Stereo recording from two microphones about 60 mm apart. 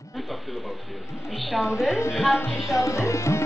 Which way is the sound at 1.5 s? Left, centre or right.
Centre.